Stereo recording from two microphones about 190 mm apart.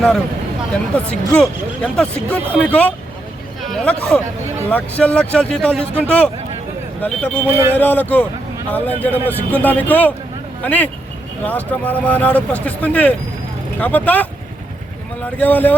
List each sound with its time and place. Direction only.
0.7 s speech: 5° left (ahead or behind)
15.4 s speech: 10° left (ahead or behind)